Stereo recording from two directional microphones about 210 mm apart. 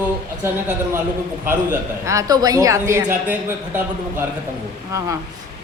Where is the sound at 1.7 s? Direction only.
15° right (ahead or behind).